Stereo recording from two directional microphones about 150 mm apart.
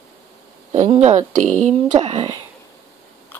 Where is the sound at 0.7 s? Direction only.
45° right (ahead or behind).